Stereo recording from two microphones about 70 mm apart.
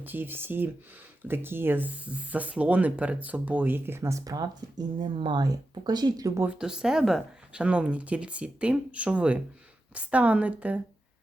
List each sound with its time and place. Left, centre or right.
0.0 s speech: right
4.2 s speech: right
6.6 s speech: centre
7.6 s speech: centre